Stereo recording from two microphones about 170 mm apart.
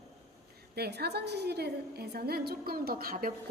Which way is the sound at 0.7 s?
70° right (ahead or behind).